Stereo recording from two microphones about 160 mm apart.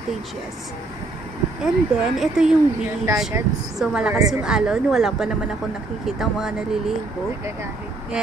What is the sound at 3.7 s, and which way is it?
A woman's voice, 5° right (ahead or behind).